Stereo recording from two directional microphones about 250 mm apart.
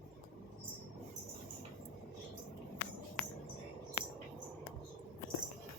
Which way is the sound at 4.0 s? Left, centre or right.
Left.